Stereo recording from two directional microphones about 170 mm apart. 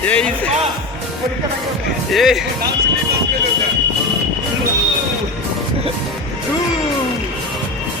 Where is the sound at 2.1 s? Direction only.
Centre (ahead or behind).